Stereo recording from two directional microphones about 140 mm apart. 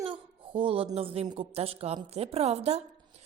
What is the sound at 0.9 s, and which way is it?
A woman's voice, 45° right (ahead or behind).